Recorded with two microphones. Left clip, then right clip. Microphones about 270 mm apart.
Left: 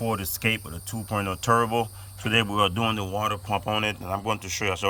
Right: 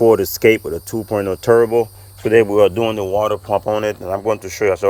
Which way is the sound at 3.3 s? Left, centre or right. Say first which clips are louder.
Right 9 dB; left.